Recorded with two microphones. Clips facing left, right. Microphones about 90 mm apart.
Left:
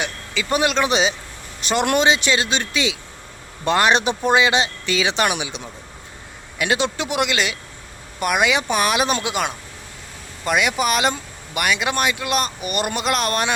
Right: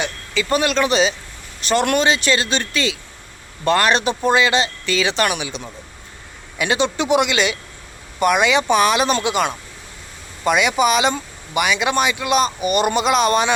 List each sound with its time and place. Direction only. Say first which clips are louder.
0.0 s speech: right 3 dB; 10° left (ahead or behind)
6.6 s speech: right 2 dB; 5° left (ahead or behind)